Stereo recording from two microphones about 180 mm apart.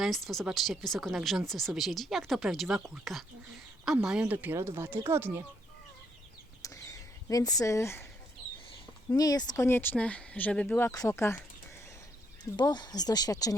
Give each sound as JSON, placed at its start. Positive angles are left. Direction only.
{"t": 0.0, "sound": "speech", "side_deg": 0}
{"t": 6.6, "sound": "a sound", "side_deg": 20}
{"t": 9.0, "sound": "speech", "side_deg": 20}
{"t": 12.5, "sound": "speech", "side_deg": 20}